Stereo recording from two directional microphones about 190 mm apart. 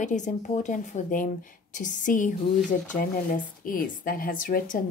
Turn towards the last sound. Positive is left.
turn(degrees=45)  # may be behind; listen again after turning